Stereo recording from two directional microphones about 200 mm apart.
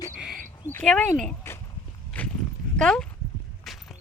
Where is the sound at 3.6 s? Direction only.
Centre (ahead or behind).